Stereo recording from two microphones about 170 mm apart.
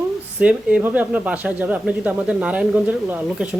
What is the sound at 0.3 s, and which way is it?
Speech, 5° right (ahead or behind).